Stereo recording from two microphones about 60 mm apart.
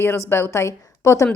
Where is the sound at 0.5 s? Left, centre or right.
Left.